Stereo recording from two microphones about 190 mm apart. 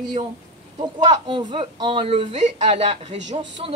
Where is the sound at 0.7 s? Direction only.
25° right (ahead or behind).